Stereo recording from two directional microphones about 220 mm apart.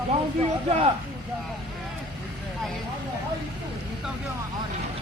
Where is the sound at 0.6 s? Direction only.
25° right (ahead or behind).